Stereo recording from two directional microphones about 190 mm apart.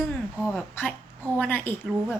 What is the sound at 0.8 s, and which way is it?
Speech, 10° left (ahead or behind).